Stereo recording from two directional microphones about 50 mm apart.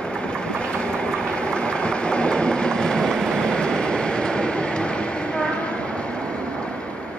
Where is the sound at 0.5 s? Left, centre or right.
Centre.